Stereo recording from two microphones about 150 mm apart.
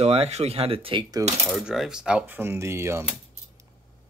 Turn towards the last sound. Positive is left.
turn(degrees=-20)  # may be behind; listen again after turning